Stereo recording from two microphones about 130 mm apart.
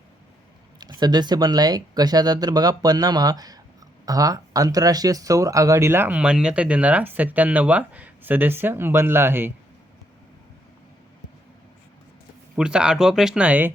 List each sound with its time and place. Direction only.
0.8 s speech: 35° right (ahead or behind); by 9.5 s 15° right (ahead or behind)
12.5 s speech: 5° right (ahead or behind)